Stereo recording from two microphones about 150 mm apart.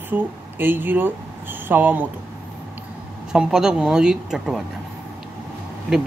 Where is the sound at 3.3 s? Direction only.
5° right (ahead or behind).